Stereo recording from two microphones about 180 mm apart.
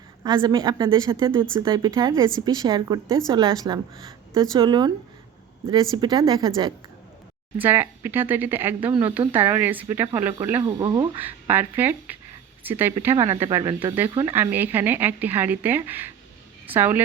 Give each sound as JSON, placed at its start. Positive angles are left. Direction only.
{"t": 0.2, "sound": "a woman's voice", "side_deg": -20}
{"t": 7.6, "sound": "speech", "side_deg": -10}
{"t": 10.7, "sound": "a woman's voice", "side_deg": -25}
{"t": 11.2, "sound": "a woman's voice", "side_deg": -10}